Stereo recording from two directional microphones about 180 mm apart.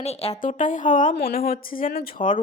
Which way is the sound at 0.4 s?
45° left (ahead or behind).